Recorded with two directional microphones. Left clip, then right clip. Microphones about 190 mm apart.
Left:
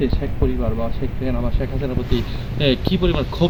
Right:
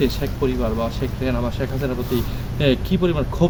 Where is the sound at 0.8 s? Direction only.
10° right (ahead or behind).